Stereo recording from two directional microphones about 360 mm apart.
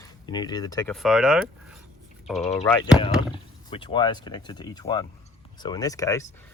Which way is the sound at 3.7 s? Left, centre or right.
Centre.